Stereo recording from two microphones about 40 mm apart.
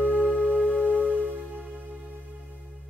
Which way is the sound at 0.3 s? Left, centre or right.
Left.